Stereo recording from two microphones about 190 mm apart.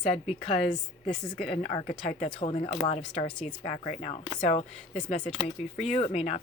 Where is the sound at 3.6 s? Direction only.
40° left (ahead or behind).